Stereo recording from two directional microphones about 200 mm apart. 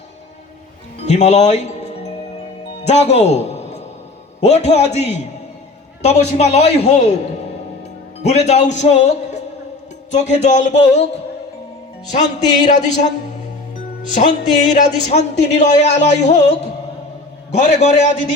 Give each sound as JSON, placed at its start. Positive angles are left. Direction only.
{"t": 1.0, "sound": "music", "side_deg": 35}
{"t": 2.8, "sound": "a man's voice", "side_deg": 35}
{"t": 8.2, "sound": "speech", "side_deg": 35}
{"t": 12.6, "sound": "speech", "side_deg": 35}